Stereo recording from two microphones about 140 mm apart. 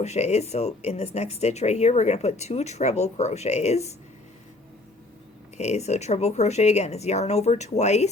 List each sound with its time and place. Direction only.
0.0 s speech: 55° left (ahead or behind)
5.5 s speech: 55° left (ahead or behind)